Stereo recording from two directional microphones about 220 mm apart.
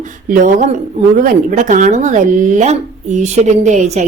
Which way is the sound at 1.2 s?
35° right (ahead or behind).